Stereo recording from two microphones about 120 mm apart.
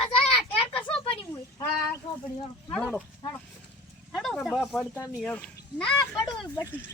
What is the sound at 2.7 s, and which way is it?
Speech, 10° left (ahead or behind).